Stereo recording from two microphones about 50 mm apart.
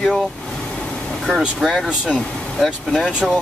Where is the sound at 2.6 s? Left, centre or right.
Centre.